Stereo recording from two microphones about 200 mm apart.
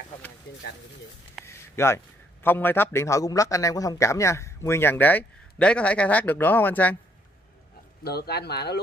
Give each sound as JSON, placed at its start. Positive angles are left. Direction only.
{"t": 1.4, "sound": "a sound", "side_deg": 15}
{"t": 2.4, "sound": "a man's voice", "side_deg": 10}
{"t": 8.0, "sound": "speech", "side_deg": 50}